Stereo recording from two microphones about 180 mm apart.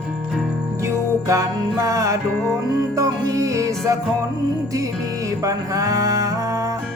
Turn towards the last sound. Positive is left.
turn(degrees=-20)  # may be behind; listen again after turning